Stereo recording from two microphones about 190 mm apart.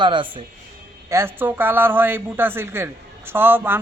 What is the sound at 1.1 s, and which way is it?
A woman's voice, 10° right (ahead or behind).